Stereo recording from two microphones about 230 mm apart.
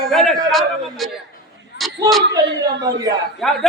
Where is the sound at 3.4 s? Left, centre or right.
Centre.